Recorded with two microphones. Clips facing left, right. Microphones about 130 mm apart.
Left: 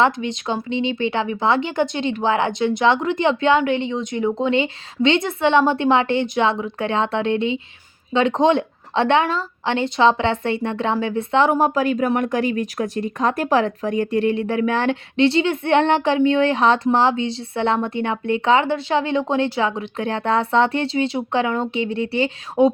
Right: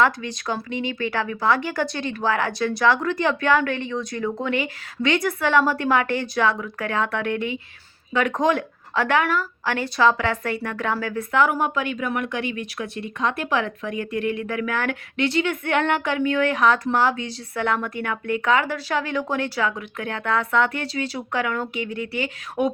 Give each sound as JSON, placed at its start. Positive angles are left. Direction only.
{"t": 0.0, "sound": "speech", "side_deg": 20}